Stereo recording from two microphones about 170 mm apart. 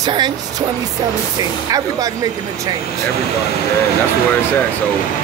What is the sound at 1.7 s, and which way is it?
Speech, 20° right (ahead or behind).